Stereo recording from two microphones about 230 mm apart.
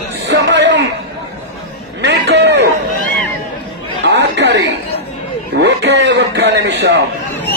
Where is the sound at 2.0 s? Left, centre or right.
Right.